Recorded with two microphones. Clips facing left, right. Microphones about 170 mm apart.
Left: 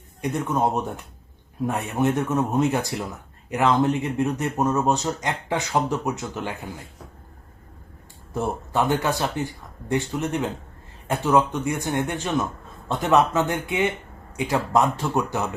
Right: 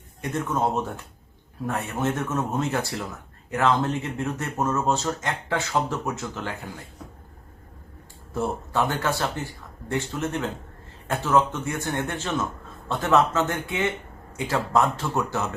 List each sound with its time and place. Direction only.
0.2 s speech: 15° left (ahead or behind)
8.3 s speech: 15° left (ahead or behind)